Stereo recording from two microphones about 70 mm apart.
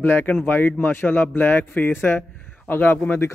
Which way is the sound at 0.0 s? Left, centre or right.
Left.